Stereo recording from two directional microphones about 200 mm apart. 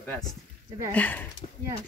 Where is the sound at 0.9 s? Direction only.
10° left (ahead or behind).